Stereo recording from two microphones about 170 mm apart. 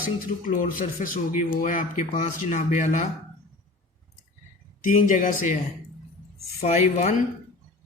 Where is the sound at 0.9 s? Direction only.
55° left (ahead or behind).